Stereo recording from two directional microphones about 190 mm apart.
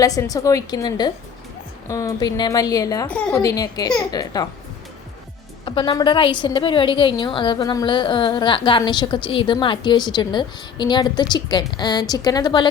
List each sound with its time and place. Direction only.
0.0 s a woman's voice: 20° left (ahead or behind)
3.1 s a woman's voice: 5° left (ahead or behind)
3.3 s a woman's voice: 20° left (ahead or behind)
5.6 s a woman's voice: 25° left (ahead or behind)